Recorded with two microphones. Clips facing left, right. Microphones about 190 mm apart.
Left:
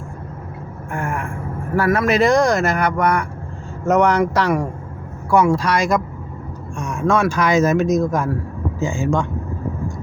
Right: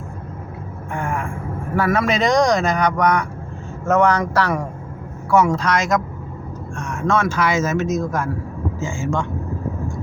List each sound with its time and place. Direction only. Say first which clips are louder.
0.9 s vehicle: even; 5° left (ahead or behind)
1.7 s speech: left 2 dB; 5° left (ahead or behind)
6.7 s vehicle: left 3 dB; 15° left (ahead or behind)
7.0 s speech: left 2 dB; 10° left (ahead or behind)